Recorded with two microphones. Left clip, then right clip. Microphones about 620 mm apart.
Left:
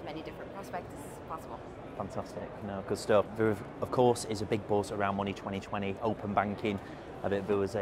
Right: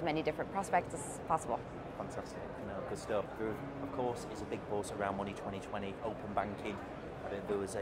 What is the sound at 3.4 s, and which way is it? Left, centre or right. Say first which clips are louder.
Speech: left 8 dB; left.